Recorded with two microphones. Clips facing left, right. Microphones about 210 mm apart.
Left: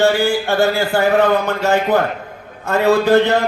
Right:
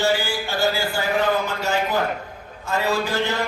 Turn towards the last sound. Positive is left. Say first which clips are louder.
# left 10 dB
turn(degrees=60)  # may be behind; listen again after turning